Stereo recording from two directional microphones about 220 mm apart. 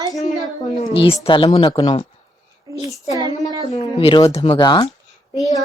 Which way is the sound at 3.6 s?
25° left (ahead or behind).